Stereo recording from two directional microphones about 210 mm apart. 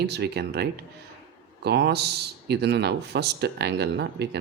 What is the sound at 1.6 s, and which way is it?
Speech, 50° right (ahead or behind).